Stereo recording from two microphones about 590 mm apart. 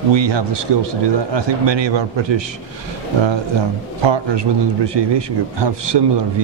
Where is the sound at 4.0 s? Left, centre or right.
Right.